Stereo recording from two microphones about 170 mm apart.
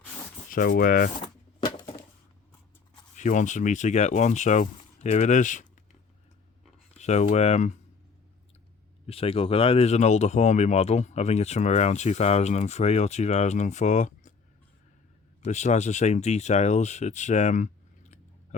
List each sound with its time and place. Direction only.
0.5 s speech: 55° left (ahead or behind)
1.2 s a sound: 25° left (ahead or behind)
3.2 s speech: 45° left (ahead or behind)
6.9 s speech: 40° left (ahead or behind)
9.0 s speech: 35° left (ahead or behind)
15.4 s speech: 45° left (ahead or behind)